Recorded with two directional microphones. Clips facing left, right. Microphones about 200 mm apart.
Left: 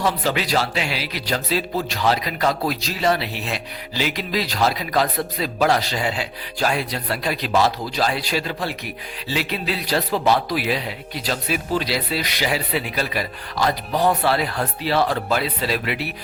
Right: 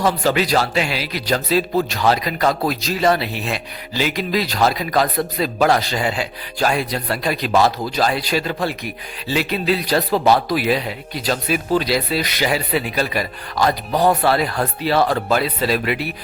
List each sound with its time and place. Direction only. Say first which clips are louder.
0.0 s speech: right 4 dB; 45° right (ahead or behind)